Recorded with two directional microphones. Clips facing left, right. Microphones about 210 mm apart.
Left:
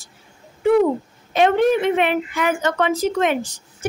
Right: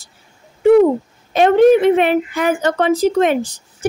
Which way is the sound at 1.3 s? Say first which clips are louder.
Right 6 dB; 40° right (ahead or behind).